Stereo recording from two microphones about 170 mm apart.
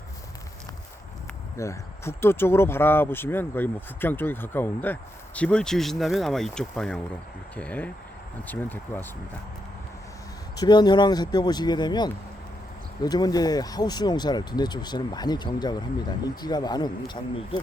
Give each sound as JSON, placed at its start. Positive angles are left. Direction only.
{"t": 1.5, "sound": "speech", "side_deg": 15}
{"t": 10.6, "sound": "speech", "side_deg": 25}